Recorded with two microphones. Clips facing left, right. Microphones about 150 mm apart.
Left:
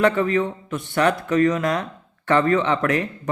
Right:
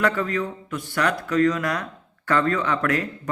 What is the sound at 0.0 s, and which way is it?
Speech, 20° left (ahead or behind).